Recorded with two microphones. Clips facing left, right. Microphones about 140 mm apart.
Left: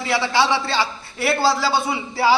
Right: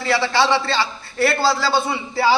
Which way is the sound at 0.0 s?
15° left (ahead or behind).